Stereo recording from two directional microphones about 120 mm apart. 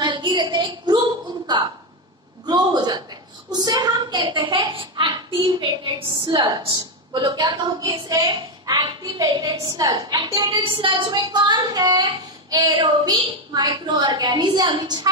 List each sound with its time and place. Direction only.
0.0 s a sound: 40° right (ahead or behind)
2.4 s a man's voice: 35° right (ahead or behind)
10.6 s a woman's voice: 45° right (ahead or behind)